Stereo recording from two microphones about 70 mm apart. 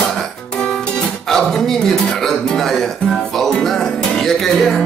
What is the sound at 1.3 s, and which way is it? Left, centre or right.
Speech, centre.